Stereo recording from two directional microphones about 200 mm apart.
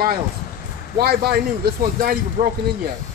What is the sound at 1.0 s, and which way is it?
Speech, 50° right (ahead or behind).